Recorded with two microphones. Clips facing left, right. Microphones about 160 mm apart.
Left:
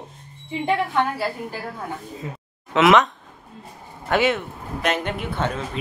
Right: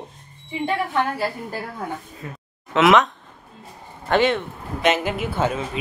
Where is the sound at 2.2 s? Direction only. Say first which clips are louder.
Left 2 dB; 20° left (ahead or behind).